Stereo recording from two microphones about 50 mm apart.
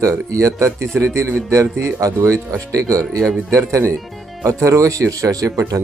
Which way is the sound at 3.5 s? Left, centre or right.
Right.